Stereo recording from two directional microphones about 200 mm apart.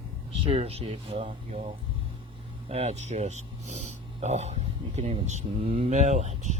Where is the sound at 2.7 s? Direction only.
30° right (ahead or behind).